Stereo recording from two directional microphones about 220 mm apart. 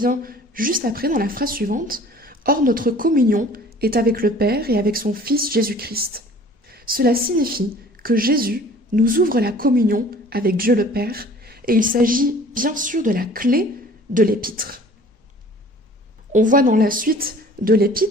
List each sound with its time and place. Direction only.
0.0 s a woman's voice: 40° right (ahead or behind)
16.3 s a woman's voice: 35° right (ahead or behind)